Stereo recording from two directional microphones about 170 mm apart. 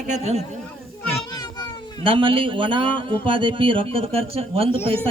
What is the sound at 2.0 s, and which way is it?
Speech, 30° right (ahead or behind).